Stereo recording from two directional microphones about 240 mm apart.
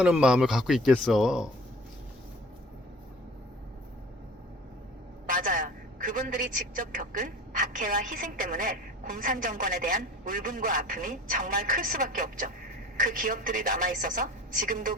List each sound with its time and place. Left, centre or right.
0.0 s speech: centre
5.2 s a man's voice: right